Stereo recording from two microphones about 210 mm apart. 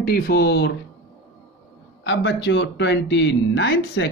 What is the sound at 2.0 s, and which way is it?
Speech, 55° left (ahead or behind).